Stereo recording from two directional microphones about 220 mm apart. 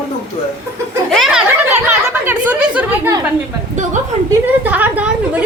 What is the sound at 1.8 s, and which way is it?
Speech, 5° right (ahead or behind).